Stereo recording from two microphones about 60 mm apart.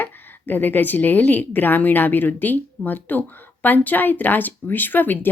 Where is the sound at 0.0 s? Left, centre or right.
Left.